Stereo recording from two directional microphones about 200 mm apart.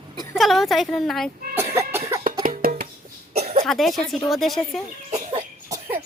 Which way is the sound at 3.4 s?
30° right (ahead or behind).